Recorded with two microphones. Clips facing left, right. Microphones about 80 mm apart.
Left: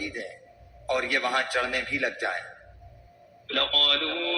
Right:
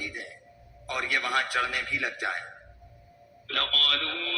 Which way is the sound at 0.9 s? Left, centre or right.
Left.